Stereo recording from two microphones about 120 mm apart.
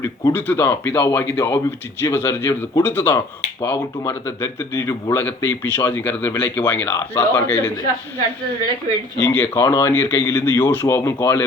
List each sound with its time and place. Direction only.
0.0 s speech: 20° left (ahead or behind)
9.2 s speech: 15° left (ahead or behind)